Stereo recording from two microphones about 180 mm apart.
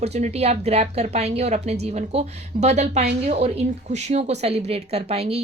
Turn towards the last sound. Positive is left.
turn(degrees=-35)  # may be behind; listen again after turning